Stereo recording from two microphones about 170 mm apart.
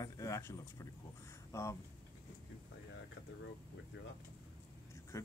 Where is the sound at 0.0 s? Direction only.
20° left (ahead or behind).